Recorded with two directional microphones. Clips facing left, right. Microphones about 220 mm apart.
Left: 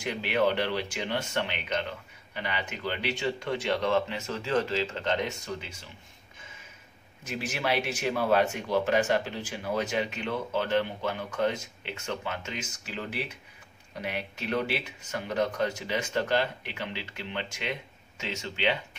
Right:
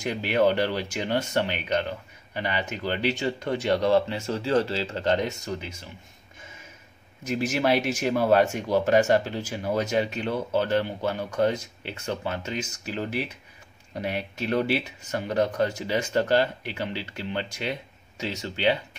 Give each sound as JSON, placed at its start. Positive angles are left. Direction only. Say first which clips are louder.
{"t": 0.0, "sound": "speech", "louder": "right 4 dB", "side_deg": -40}
{"t": 7.2, "sound": "speech", "louder": "right 7 dB", "side_deg": -40}